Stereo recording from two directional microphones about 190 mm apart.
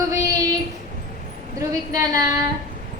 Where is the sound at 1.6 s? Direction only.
20° right (ahead or behind).